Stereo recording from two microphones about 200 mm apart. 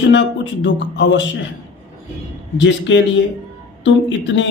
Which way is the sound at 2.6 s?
65° left (ahead or behind).